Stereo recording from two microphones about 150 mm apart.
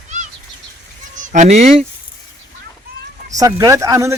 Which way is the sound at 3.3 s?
25° right (ahead or behind).